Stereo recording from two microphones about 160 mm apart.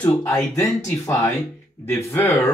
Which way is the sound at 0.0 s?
20° left (ahead or behind).